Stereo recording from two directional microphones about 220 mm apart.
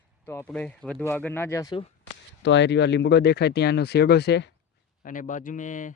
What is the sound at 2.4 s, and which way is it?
Speech, 55° left (ahead or behind).